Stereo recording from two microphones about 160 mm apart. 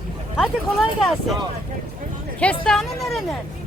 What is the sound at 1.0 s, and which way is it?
Speech, centre (ahead or behind).